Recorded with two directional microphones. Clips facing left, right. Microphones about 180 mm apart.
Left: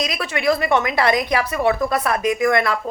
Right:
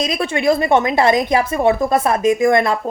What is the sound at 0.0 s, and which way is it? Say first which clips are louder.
A woman's voice: right 4 dB; 25° right (ahead or behind).